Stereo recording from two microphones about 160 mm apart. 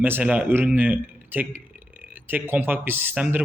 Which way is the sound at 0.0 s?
10° right (ahead or behind).